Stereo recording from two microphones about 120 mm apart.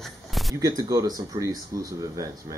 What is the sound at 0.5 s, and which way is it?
Speech, 30° right (ahead or behind).